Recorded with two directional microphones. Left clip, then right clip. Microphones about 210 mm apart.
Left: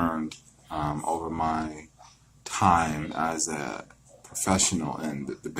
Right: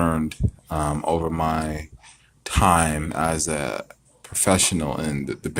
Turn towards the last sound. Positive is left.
turn(degrees=-35)  # may be behind; listen again after turning